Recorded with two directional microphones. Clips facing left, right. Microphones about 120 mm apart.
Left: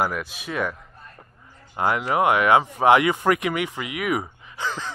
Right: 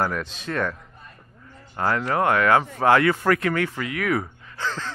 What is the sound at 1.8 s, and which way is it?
Speech, 15° left (ahead or behind).